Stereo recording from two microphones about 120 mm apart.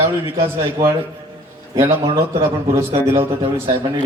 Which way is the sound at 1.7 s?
25° right (ahead or behind).